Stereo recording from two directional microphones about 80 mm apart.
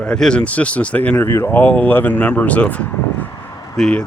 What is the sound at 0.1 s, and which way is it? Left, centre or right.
Speech, centre.